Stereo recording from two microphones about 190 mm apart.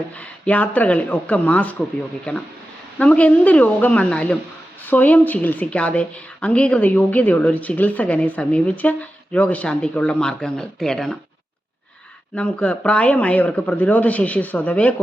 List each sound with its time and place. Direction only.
0.1 s a woman's voice: 5° left (ahead or behind)
3.0 s a woman's voice: 5° left (ahead or behind)
12.3 s a woman's voice: 5° left (ahead or behind)